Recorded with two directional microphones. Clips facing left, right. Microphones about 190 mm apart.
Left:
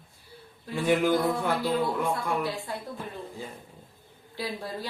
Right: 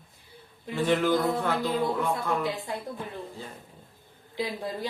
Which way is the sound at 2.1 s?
20° right (ahead or behind).